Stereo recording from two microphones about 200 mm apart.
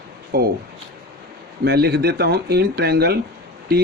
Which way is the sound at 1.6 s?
55° right (ahead or behind).